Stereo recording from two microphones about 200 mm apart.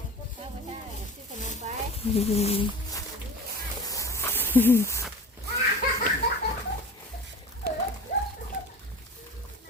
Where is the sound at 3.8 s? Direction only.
15° left (ahead or behind).